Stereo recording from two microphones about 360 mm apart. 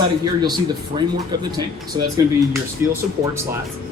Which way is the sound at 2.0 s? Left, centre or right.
Centre.